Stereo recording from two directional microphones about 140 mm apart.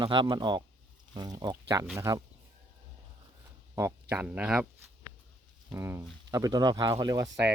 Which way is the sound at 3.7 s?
20° right (ahead or behind).